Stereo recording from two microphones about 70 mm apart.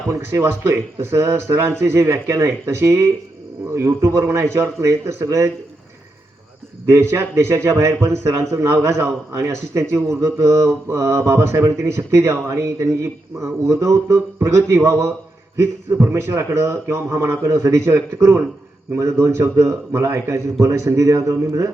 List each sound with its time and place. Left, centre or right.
0.1 s speech: right
6.8 s a man's voice: right